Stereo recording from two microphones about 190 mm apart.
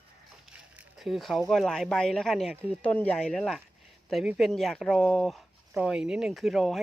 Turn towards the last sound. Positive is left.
turn(degrees=0)  # may be behind; listen again after turning